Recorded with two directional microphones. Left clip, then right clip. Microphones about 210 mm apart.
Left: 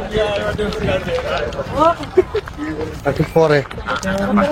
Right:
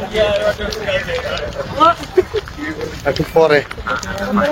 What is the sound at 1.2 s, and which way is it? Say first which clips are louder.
Speech: left 1 dB; 45° left (ahead or behind).